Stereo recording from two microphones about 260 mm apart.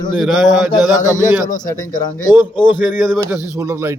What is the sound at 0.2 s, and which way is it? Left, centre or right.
Speech, centre.